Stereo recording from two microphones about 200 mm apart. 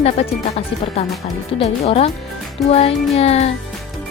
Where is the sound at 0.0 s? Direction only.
30° left (ahead or behind).